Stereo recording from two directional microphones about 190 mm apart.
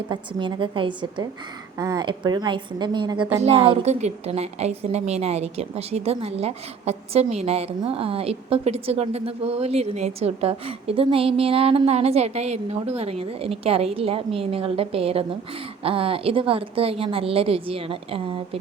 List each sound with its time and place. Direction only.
0.1 s a woman's voice: 25° right (ahead or behind)